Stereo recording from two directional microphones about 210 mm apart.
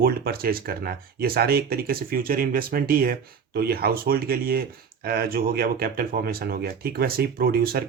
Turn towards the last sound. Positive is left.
turn(degrees=-45)  # may be behind; listen again after turning